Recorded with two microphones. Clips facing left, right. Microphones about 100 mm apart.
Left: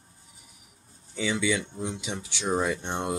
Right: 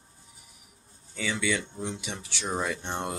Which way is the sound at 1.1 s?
10° left (ahead or behind).